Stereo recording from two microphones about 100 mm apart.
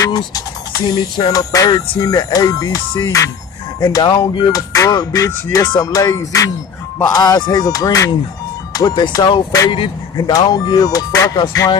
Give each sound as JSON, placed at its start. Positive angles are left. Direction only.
{"t": 0.0, "sound": "speech", "side_deg": 35}
{"t": 8.7, "sound": "speech", "side_deg": 45}